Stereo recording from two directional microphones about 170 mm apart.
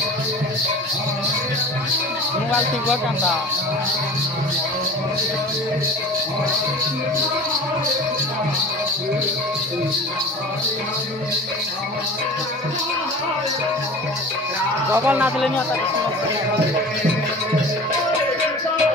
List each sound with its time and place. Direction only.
14.9 s speech: 10° right (ahead or behind)